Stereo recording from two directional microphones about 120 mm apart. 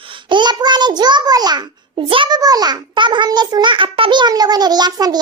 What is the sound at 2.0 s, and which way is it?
A child's voice, 45° right (ahead or behind).